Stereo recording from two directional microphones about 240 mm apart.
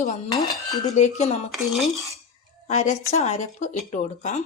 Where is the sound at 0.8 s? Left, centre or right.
Left.